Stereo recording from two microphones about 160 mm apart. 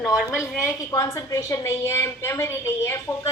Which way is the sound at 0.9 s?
20° left (ahead or behind).